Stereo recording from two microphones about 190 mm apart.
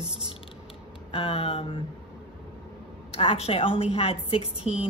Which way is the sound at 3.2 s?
30° left (ahead or behind).